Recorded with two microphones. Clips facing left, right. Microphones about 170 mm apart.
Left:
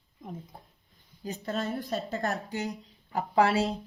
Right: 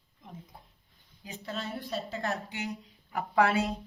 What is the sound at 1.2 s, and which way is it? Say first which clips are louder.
A woman's voice: left 6 dB; 45° left (ahead or behind).